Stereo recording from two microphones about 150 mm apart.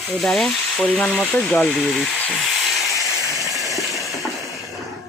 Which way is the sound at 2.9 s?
20° left (ahead or behind).